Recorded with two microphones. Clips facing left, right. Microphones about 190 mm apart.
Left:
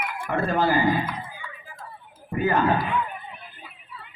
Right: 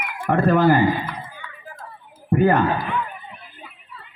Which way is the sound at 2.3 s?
55° right (ahead or behind).